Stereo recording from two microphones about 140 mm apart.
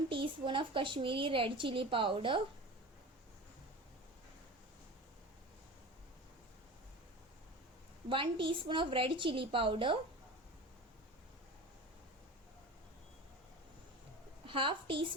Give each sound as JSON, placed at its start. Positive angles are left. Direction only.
{"t": 0.1, "sound": "a woman's voice", "side_deg": -35}
{"t": 8.1, "sound": "a woman's voice", "side_deg": -40}
{"t": 14.4, "sound": "a woman's voice", "side_deg": -35}